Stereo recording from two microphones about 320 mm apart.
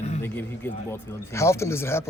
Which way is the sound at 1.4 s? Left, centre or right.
Centre.